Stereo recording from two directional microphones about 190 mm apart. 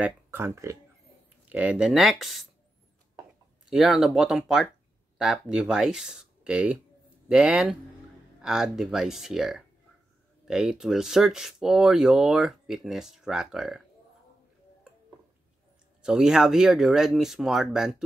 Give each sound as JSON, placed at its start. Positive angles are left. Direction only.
{"t": 0.0, "sound": "speech", "side_deg": -10}
{"t": 3.7, "sound": "speech", "side_deg": 0}
{"t": 16.0, "sound": "speech", "side_deg": -5}